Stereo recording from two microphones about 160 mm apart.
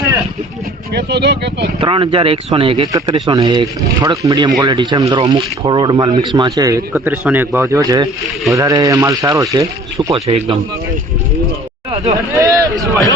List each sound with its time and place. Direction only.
0.9 s speech: 90° right
1.8 s speech: 35° right (ahead or behind)
10.2 s speech: 40° right (ahead or behind)
12.1 s speech: 20° right (ahead or behind)